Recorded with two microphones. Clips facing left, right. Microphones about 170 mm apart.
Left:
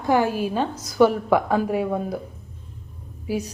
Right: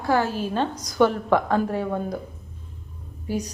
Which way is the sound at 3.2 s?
5° left (ahead or behind).